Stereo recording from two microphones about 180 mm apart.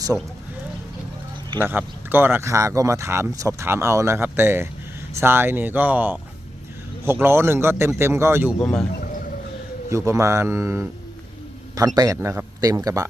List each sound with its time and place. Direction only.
1.6 s speech: 10° right (ahead or behind)
8.6 s a man's voice: 5° left (ahead or behind)
9.0 s whale vocalization: 50° left (ahead or behind)
10.1 s speech: 15° right (ahead or behind)
11.9 s speech: 15° right (ahead or behind)